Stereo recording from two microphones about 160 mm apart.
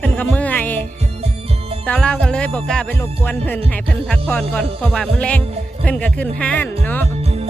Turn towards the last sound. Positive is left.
turn(degrees=10)  # may be behind; listen again after turning